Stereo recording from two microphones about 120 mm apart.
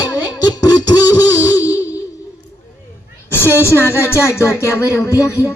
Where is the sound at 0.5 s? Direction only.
30° left (ahead or behind).